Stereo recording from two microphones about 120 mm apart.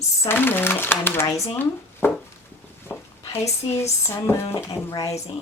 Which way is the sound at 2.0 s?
20° left (ahead or behind).